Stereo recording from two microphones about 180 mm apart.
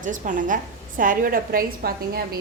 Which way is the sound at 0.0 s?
45° right (ahead or behind).